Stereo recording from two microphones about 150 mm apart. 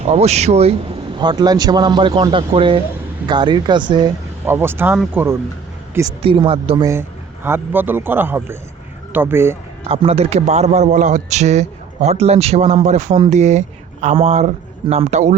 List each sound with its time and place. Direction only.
0.1 s a man's voice: 45° right (ahead or behind)
1.2 s speech: 25° right (ahead or behind)
4.4 s a man's voice: 15° right (ahead or behind)
6.2 s speech: 35° right (ahead or behind)
7.4 s a man's voice: 15° right (ahead or behind)
9.9 s a man's voice: 40° right (ahead or behind)